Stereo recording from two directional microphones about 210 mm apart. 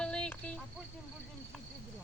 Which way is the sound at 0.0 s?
5° left (ahead or behind).